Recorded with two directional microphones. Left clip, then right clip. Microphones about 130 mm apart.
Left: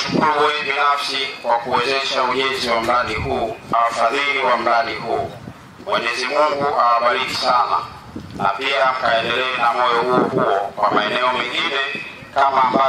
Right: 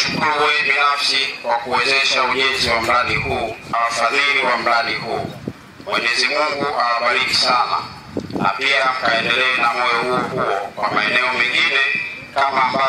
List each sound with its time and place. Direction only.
0.0 s a man's voice: 30° right (ahead or behind)